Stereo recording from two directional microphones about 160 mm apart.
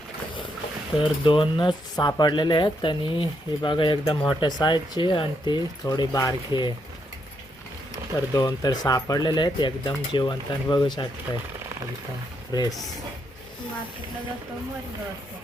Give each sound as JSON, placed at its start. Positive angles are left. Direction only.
{"t": 1.0, "sound": "speech", "side_deg": 30}
{"t": 8.1, "sound": "speech", "side_deg": 20}
{"t": 12.5, "sound": "speech", "side_deg": 25}